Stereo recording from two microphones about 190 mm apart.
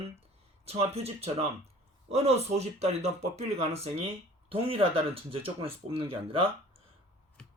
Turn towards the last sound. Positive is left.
turn(degrees=-30)  # may be behind; listen again after turning